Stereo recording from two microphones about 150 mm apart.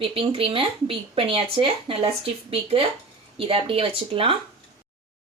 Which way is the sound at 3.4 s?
35° right (ahead or behind).